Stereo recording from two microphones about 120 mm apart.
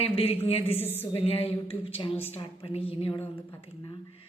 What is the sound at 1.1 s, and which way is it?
A woman's voice, 55° left (ahead or behind).